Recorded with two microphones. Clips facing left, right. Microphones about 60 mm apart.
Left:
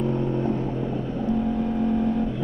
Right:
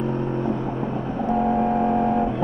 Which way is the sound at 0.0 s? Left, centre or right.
Right.